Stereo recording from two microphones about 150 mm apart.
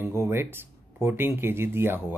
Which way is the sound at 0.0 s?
15° right (ahead or behind).